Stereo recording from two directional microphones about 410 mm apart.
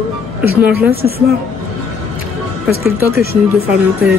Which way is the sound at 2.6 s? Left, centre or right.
Centre.